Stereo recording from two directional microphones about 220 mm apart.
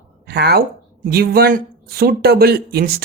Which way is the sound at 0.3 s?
45° right (ahead or behind).